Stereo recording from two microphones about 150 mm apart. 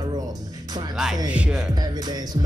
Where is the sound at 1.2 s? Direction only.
10° right (ahead or behind).